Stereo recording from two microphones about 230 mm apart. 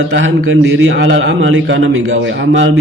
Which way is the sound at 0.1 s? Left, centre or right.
Right.